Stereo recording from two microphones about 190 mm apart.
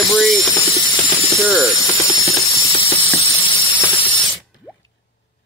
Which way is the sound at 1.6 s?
15° left (ahead or behind).